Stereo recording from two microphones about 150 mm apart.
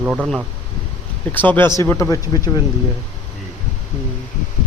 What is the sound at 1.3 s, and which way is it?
Speech, 15° left (ahead or behind).